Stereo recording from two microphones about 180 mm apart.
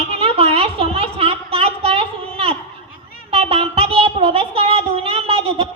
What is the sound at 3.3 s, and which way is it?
Child singing, 30° right (ahead or behind).